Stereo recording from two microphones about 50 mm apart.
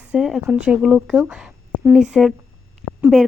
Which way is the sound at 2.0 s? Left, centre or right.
Centre.